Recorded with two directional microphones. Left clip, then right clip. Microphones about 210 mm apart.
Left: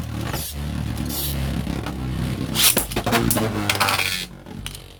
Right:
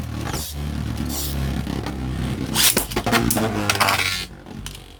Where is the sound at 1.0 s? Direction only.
5° left (ahead or behind).